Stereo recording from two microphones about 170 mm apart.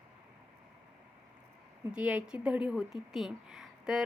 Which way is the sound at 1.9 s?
5° right (ahead or behind).